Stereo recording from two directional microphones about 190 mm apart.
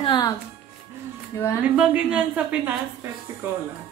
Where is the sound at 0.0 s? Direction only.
25° left (ahead or behind).